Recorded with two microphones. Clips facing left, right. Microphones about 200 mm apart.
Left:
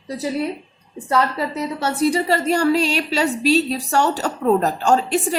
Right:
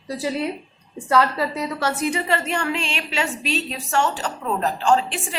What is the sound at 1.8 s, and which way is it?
A woman's voice, 30° left (ahead or behind).